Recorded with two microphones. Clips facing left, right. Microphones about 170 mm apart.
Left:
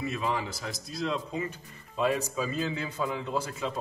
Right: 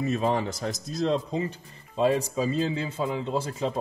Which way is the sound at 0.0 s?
40° right (ahead or behind).